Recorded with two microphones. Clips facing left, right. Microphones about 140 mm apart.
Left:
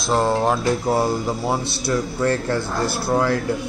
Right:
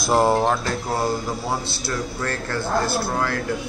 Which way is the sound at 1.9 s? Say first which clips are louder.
Left 7 dB; 20° left (ahead or behind).